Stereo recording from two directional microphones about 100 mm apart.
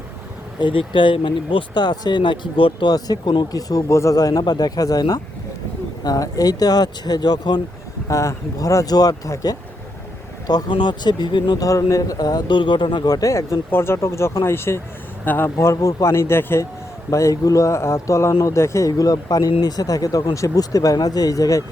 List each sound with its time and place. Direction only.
0.6 s speech: 60° left (ahead or behind)
2.9 s speech: 45° left (ahead or behind)
8.0 s speech: 30° left (ahead or behind)
10.4 s speech: 45° left (ahead or behind)